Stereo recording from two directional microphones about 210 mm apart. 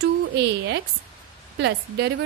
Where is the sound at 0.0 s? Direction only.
55° right (ahead or behind).